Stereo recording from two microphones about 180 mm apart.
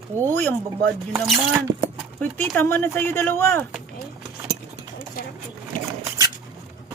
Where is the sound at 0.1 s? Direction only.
40° right (ahead or behind).